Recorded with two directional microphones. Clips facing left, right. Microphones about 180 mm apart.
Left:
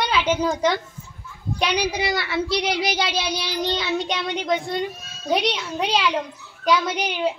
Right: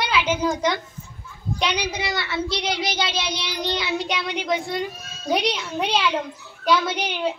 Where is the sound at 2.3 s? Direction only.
25° right (ahead or behind).